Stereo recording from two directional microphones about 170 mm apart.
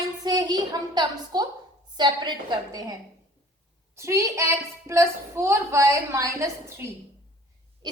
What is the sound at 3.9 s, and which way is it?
A woman's voice, 15° right (ahead or behind).